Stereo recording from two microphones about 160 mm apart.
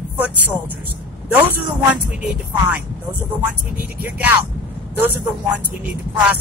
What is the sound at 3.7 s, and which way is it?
Speech, 10° right (ahead or behind).